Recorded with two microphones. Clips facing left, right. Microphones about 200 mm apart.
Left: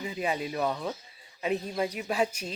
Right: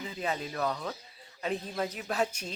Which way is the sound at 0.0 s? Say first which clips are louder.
Left 3 dB; 15° left (ahead or behind).